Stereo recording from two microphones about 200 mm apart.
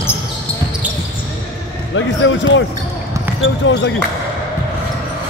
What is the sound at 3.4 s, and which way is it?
Speech, 65° left (ahead or behind).